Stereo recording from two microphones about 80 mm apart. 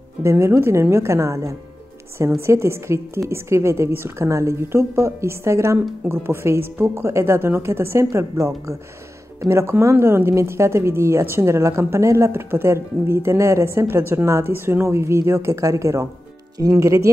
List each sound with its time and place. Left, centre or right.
0.2 s a woman's voice: right